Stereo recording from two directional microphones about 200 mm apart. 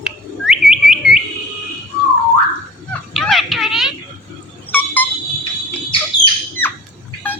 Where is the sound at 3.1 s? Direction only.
Centre (ahead or behind).